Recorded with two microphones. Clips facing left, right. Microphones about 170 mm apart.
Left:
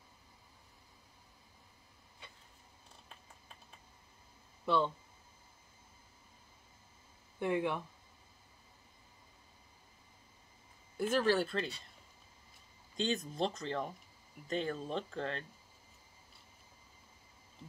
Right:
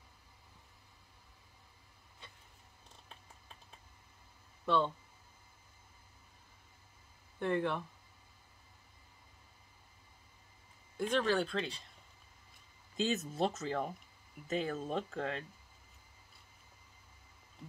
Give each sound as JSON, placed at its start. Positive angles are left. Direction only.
{"t": 7.3, "sound": "speech", "side_deg": 10}
{"t": 11.0, "sound": "speech", "side_deg": 5}
{"t": 12.9, "sound": "speech", "side_deg": -5}